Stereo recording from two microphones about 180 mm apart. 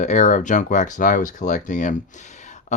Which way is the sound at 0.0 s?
45° left (ahead or behind).